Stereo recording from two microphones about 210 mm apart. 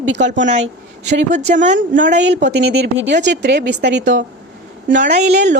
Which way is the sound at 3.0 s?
55° right (ahead or behind).